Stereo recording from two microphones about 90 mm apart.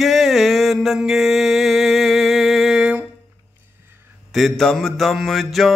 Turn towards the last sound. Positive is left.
turn(degrees=0)  # may be behind; listen again after turning